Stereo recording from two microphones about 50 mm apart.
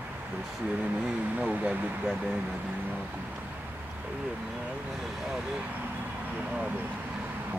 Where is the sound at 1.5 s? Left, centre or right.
Right.